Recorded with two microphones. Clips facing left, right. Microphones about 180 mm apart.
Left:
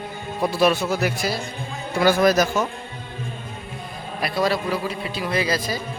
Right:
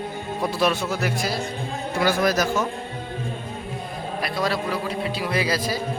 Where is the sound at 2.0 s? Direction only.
20° left (ahead or behind).